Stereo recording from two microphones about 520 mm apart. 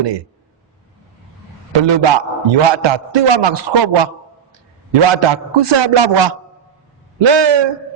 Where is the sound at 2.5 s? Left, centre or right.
Right.